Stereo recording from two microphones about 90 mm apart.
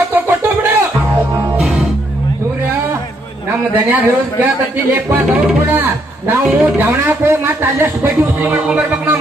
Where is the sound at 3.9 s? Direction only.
20° right (ahead or behind).